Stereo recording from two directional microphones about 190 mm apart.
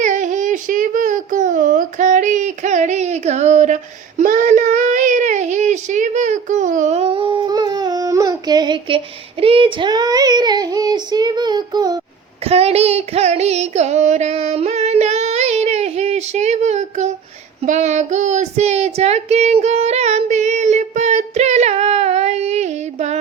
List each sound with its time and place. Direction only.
0.0 s a sound: 40° right (ahead or behind)
4.2 s child singing: 45° right (ahead or behind); by 11.9 s 20° right (ahead or behind)
12.5 s child singing: 35° right (ahead or behind)